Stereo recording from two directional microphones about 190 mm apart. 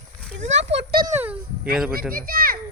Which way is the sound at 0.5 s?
65° right (ahead or behind).